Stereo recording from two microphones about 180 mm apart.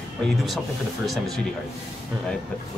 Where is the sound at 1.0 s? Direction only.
Centre (ahead or behind).